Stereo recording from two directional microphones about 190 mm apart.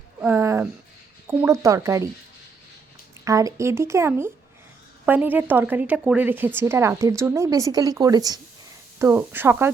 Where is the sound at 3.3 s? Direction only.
15° right (ahead or behind).